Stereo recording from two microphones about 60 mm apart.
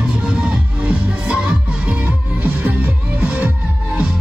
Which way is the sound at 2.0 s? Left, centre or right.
Right.